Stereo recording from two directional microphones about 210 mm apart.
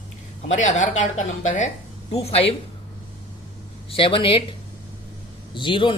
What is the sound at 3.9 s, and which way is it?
Speech, 25° left (ahead or behind).